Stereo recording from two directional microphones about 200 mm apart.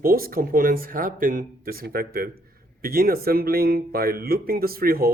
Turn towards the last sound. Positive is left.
turn(degrees=-50)  # may be behind; listen again after turning